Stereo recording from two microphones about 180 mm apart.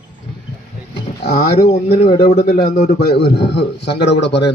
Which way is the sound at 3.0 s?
65° left (ahead or behind).